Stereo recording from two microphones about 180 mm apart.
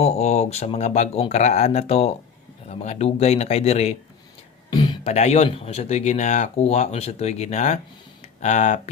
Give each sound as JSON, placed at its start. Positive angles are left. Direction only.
{"t": 0.0, "sound": "speech", "side_deg": 35}
{"t": 4.7, "sound": "a sound", "side_deg": 25}
{"t": 5.1, "sound": "speech", "side_deg": 35}